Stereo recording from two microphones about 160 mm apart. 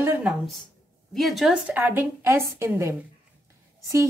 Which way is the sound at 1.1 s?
Centre (ahead or behind).